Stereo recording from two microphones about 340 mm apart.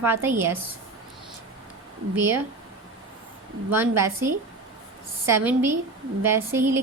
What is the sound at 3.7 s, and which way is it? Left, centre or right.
A woman's voice, centre.